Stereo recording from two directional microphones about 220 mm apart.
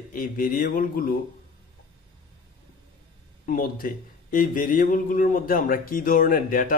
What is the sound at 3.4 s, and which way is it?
A man's voice, 40° left (ahead or behind).